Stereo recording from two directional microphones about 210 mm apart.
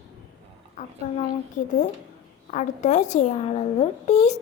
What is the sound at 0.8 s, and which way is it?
Speech, 40° left (ahead or behind).